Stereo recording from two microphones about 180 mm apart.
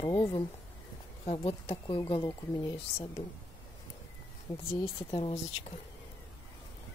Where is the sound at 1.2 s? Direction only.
35° left (ahead or behind).